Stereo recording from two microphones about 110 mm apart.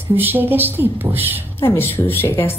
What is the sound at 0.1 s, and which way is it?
Speech, 20° right (ahead or behind).